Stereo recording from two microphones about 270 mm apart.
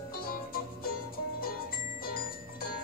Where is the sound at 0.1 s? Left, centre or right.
Left.